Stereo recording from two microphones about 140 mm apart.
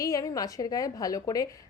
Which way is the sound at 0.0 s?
25° left (ahead or behind).